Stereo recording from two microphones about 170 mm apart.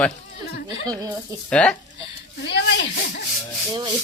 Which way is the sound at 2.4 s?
90° left.